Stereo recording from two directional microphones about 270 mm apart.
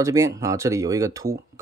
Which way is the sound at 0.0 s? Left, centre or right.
Centre.